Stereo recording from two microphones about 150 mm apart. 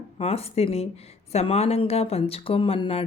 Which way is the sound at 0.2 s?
45° left (ahead or behind).